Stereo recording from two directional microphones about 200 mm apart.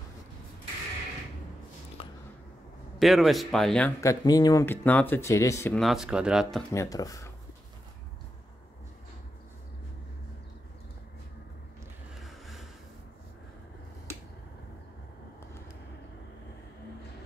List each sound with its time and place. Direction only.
2.0 s a sound: 25° left (ahead or behind)
3.0 s speech: centre (ahead or behind)
4.0 s speech: 15° left (ahead or behind)
5.8 s speech: centre (ahead or behind)
6.7 s speech: 15° left (ahead or behind)
12.2 s vehicle: centre (ahead or behind)